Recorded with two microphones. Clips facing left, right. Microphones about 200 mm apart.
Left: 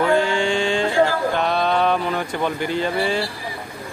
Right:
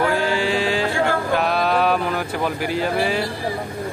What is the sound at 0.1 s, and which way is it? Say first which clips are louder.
Mantra: left 2 dB; 5° right (ahead or behind).